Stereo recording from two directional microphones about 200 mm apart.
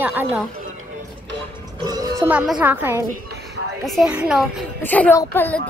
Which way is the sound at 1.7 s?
20° right (ahead or behind).